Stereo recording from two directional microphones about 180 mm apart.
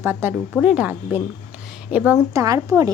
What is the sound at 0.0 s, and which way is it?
Speech, 10° right (ahead or behind).